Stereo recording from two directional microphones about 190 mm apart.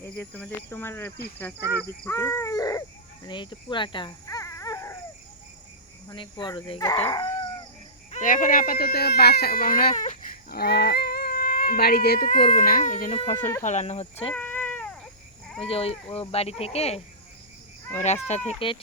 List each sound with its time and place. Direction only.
0.0 s speech: 10° left (ahead or behind)
1.5 s speech: 15° right (ahead or behind)
2.0 s speech: 15° left (ahead or behind)
6.1 s speech: 25° left (ahead or behind)
8.1 s speech: 45° left (ahead or behind)
10.6 s speech: 60° left (ahead or behind); by 14.3 s 30° left (ahead or behind)
14.3 s cat: 10° left (ahead or behind)
15.6 s speech: 30° left (ahead or behind)
18.0 s speech: 35° left (ahead or behind)